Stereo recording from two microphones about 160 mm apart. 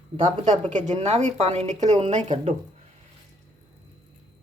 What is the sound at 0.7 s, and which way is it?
Speech, 50° right (ahead or behind).